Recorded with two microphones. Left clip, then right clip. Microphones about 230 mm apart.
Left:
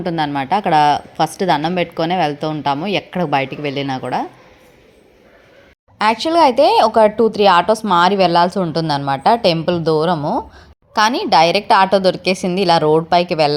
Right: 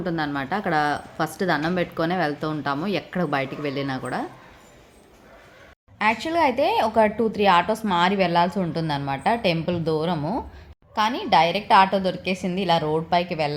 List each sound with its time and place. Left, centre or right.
0.0 s speech: left
6.0 s a woman's voice: left